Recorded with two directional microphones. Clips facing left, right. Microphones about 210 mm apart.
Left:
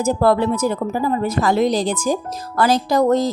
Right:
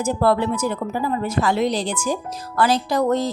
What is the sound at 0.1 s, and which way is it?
Speech, 40° left (ahead or behind).